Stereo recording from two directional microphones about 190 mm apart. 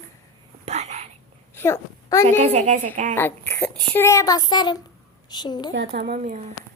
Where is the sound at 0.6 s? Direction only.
35° right (ahead or behind).